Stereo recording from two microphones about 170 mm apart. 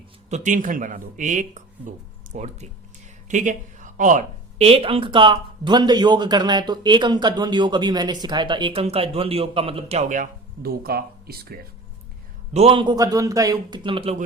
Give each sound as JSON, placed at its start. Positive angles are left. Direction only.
{"t": 0.3, "sound": "speech", "side_deg": -45}
{"t": 12.5, "sound": "speech", "side_deg": -35}